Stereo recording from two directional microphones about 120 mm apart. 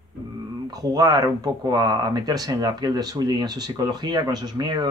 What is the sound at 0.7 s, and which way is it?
Speech, 30° right (ahead or behind).